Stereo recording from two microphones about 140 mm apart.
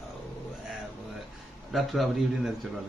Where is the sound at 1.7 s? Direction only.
Centre (ahead or behind).